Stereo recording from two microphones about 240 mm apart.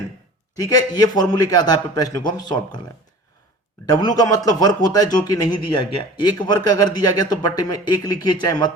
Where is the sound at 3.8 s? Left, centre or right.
Centre.